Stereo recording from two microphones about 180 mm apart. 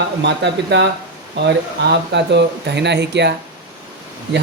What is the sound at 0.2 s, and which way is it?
Speech, 70° right (ahead or behind).